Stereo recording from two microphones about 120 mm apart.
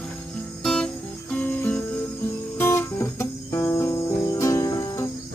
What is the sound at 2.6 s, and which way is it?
Music, 20° left (ahead or behind).